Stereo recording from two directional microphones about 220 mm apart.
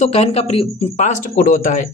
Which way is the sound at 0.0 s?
30° left (ahead or behind).